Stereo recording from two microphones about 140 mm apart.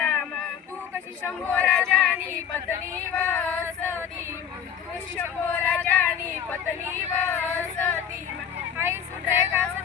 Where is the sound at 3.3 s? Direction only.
10° left (ahead or behind).